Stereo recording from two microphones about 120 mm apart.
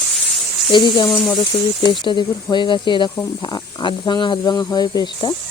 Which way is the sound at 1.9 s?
40° left (ahead or behind).